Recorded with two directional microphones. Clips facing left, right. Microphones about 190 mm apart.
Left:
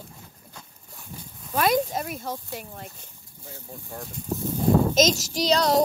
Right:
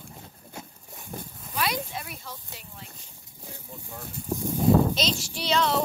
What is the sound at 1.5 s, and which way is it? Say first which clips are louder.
Speech: left 8 dB; 45° left (ahead or behind).